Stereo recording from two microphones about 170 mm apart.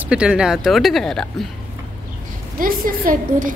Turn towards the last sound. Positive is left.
turn(degrees=-55)  # may be behind; listen again after turning